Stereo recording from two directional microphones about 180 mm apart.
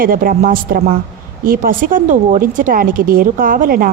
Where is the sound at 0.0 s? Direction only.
50° right (ahead or behind).